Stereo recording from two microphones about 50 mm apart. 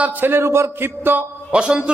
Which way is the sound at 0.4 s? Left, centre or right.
Right.